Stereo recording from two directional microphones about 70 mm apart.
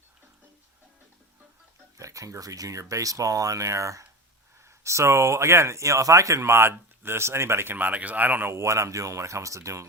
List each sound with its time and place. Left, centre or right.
2.0 s speech: right
8.5 s speech: right